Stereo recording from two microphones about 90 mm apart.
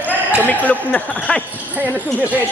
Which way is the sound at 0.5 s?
20° left (ahead or behind).